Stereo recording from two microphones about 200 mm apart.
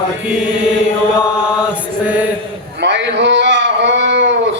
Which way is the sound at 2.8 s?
60° right (ahead or behind).